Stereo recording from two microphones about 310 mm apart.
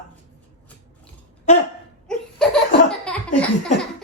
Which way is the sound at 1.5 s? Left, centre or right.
Left.